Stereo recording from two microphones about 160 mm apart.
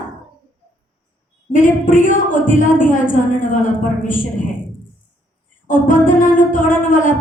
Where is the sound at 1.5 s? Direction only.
55° left (ahead or behind).